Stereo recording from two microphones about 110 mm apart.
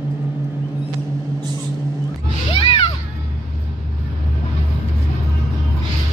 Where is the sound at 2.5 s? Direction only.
60° left (ahead or behind).